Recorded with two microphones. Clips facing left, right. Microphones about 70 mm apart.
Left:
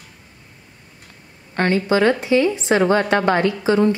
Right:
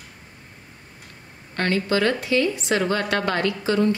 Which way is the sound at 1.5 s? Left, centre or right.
Left.